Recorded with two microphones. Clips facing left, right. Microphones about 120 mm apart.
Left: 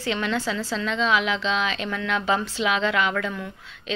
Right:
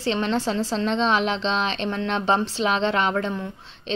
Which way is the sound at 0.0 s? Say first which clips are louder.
Right 3 dB; 30° right (ahead or behind).